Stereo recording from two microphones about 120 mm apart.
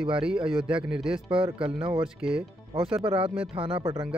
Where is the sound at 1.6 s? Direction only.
45° right (ahead or behind).